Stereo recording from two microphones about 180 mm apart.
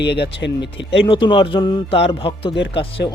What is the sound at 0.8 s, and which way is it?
Speech, 90° left.